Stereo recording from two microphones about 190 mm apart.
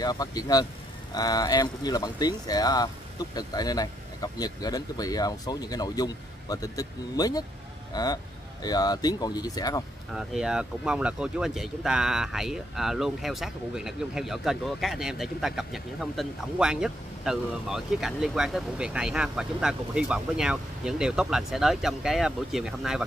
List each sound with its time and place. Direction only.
0.0 s speech: 20° left (ahead or behind)
10.1 s speech: 5° right (ahead or behind)